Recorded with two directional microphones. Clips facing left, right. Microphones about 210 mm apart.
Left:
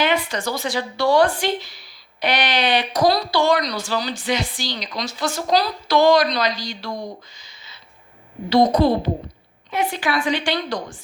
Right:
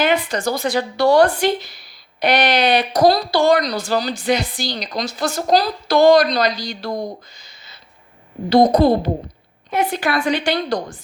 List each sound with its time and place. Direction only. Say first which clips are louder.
0.0 s a woman's voice: right 3 dB; 50° right (ahead or behind)
8.5 s a woman's voice: right 3 dB; 35° right (ahead or behind)